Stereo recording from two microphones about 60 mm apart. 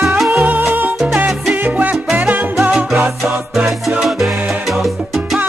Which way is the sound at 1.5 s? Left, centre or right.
Right.